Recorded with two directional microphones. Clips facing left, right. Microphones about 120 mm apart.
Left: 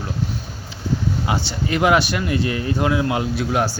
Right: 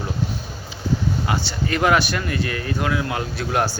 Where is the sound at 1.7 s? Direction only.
15° left (ahead or behind).